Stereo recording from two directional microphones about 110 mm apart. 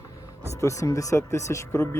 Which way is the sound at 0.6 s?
30° left (ahead or behind).